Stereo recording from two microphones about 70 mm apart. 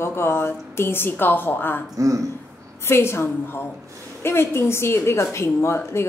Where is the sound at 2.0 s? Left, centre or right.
Right.